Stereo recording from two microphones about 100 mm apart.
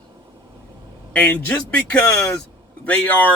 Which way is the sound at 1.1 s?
15° left (ahead or behind).